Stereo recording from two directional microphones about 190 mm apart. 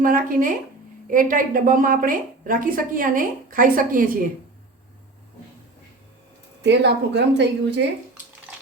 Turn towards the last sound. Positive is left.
turn(degrees=-65)  # may be behind; listen again after turning